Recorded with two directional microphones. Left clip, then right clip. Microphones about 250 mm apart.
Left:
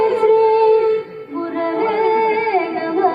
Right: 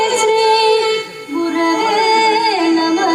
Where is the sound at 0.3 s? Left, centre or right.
Right.